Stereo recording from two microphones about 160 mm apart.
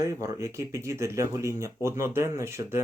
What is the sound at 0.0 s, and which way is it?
Speech, 20° right (ahead or behind).